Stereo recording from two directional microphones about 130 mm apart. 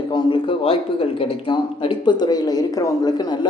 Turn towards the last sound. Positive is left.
turn(degrees=30)  # may be behind; listen again after turning